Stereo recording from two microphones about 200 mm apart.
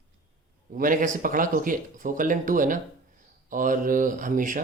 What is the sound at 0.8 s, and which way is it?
Speech, 40° right (ahead or behind).